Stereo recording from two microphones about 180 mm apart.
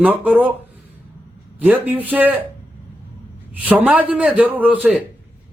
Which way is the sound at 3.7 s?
5° right (ahead or behind).